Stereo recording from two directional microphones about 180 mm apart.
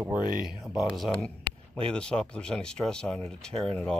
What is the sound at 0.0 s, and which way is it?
Speech, 5° right (ahead or behind).